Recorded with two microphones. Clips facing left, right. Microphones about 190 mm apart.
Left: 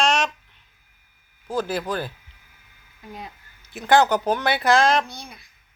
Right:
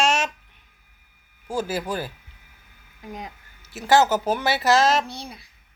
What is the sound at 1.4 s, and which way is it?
Speech, 10° right (ahead or behind).